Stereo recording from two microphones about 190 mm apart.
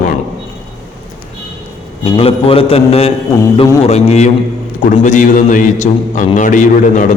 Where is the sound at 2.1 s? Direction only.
30° left (ahead or behind).